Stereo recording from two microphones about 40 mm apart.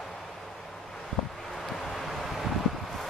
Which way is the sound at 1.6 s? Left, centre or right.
Centre.